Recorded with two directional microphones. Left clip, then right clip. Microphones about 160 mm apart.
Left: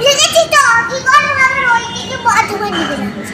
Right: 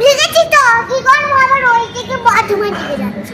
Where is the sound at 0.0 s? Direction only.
15° right (ahead or behind).